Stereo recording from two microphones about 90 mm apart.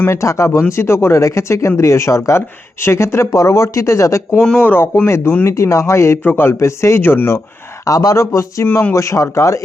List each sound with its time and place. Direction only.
0.1 s speech: 35° left (ahead or behind)
4.4 s speech: 10° left (ahead or behind)
4.6 s speech: 25° left (ahead or behind)
7.9 s speech: 40° left (ahead or behind)
8.6 s speech: 25° left (ahead or behind)